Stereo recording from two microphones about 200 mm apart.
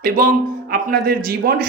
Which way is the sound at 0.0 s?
45° right (ahead or behind).